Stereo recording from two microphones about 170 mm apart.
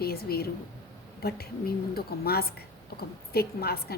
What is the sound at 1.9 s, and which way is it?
A woman's voice, 65° left (ahead or behind).